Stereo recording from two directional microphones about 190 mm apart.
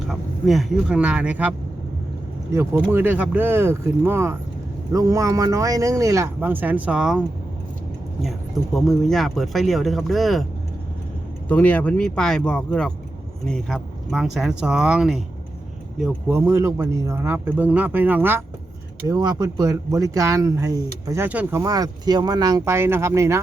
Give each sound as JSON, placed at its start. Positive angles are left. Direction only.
{"t": 0.1, "sound": "speech", "side_deg": 0}
{"t": 11.4, "sound": "speech", "side_deg": 10}
{"t": 19.0, "sound": "speech", "side_deg": -20}